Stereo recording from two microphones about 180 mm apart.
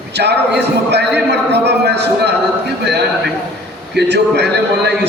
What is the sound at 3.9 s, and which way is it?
Speech, 70° right (ahead or behind).